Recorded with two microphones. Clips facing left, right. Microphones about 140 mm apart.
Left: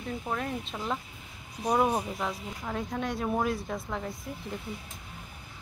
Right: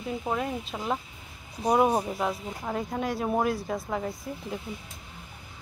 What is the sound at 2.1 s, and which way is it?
Speech, 10° right (ahead or behind).